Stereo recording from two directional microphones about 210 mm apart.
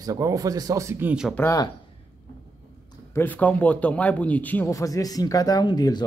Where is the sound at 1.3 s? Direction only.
15° left (ahead or behind).